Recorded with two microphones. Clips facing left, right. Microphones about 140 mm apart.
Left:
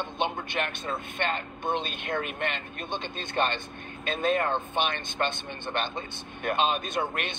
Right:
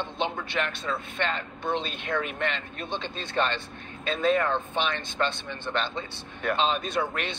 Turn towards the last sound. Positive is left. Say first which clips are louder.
# right 2 dB
turn(degrees=50)  # may be behind; listen again after turning